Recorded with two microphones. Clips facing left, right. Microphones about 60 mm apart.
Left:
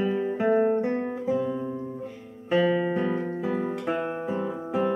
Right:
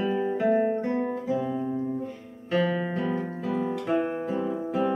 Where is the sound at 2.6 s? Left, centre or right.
Centre.